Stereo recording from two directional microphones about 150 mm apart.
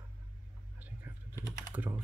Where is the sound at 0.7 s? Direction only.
10° right (ahead or behind).